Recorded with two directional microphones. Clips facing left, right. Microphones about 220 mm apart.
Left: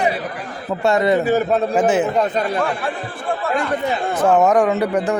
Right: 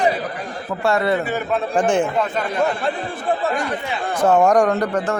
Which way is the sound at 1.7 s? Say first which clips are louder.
Right 1 dB; 5° left (ahead or behind).